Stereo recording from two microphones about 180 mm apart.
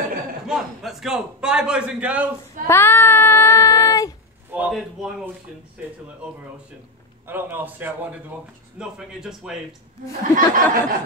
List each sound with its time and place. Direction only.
0.5 s a man's voice: centre (ahead or behind)
2.7 s child singing: 10° left (ahead or behind)
4.6 s a man's voice: 5° right (ahead or behind)
7.2 s a man's voice: 10° right (ahead or behind)
10.3 s a sound: 50° right (ahead or behind)